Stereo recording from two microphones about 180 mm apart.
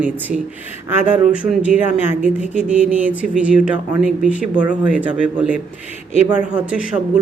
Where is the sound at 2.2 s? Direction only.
40° right (ahead or behind).